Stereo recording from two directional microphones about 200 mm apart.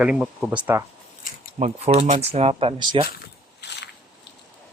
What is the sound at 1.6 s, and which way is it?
Speech, 30° right (ahead or behind).